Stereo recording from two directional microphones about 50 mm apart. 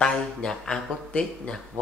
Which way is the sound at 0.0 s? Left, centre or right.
Centre.